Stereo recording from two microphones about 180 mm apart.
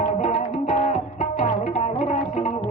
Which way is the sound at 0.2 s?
35° left (ahead or behind).